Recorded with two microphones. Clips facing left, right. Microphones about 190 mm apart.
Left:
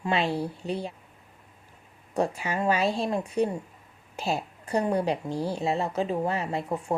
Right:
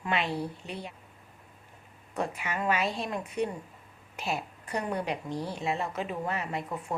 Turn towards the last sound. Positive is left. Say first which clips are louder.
# left 5 dB
turn(degrees=30)  # may be behind; listen again after turning